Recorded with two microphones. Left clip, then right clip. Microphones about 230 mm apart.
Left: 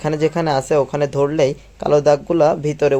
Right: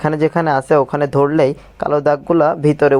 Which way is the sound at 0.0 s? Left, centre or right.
Centre.